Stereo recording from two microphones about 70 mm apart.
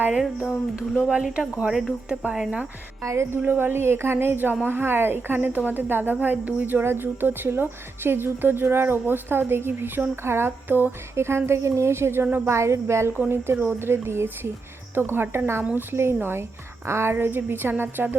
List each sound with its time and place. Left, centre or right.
1.0 s speech: centre
3.0 s speech: right
3.3 s a woman's voice: right
12.5 s a woman's voice: right